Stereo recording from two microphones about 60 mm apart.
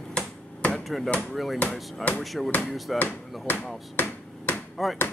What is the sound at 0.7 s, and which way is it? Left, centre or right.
Hammer, centre.